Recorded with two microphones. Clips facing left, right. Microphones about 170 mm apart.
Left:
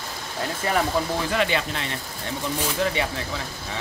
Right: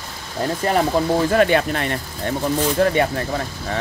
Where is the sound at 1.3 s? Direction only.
50° right (ahead or behind).